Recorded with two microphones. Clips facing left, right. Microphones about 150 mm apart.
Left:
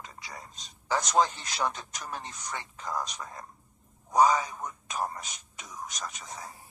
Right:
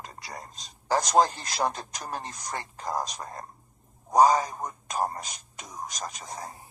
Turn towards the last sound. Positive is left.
turn(degrees=-35)  # may be behind; listen again after turning